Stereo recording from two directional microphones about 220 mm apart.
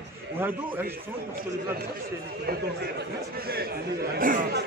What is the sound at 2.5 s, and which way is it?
Speech, 45° right (ahead or behind).